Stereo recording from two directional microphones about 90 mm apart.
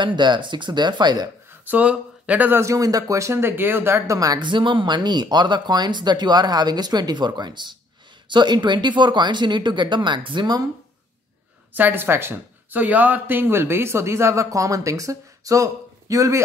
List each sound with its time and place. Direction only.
0.0 s speech: 55° right (ahead or behind)
1.7 s speech: 15° right (ahead or behind)
2.6 s speech: 40° right (ahead or behind)
4.2 s speech: 45° right (ahead or behind)
4.5 s speech: 65° right (ahead or behind)
11.7 s speech: 20° right (ahead or behind); by 16.3 s 40° right (ahead or behind)